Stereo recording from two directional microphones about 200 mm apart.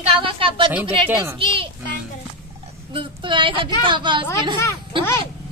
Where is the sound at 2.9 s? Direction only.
25° right (ahead or behind).